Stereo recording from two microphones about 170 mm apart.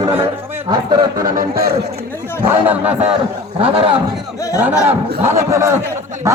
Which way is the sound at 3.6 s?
35° right (ahead or behind).